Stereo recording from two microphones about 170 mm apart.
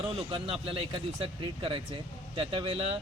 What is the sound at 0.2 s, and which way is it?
Speech, 30° right (ahead or behind).